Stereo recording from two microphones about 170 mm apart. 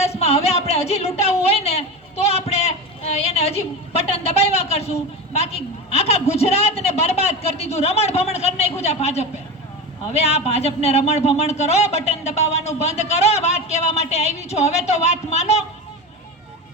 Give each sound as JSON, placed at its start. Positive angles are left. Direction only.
{"t": 0.0, "sound": "a woman's voice", "side_deg": 40}